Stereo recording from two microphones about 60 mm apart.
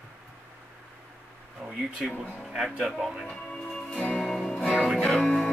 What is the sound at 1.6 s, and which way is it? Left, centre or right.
Speech, centre.